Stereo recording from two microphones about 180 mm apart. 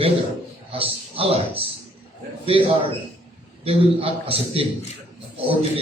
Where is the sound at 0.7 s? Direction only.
30° right (ahead or behind).